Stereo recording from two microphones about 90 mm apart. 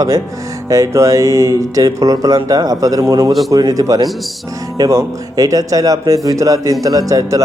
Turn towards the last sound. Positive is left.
turn(degrees=-40)  # may be behind; listen again after turning